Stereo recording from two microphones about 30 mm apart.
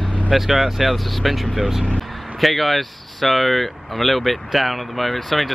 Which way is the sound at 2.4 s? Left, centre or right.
Centre.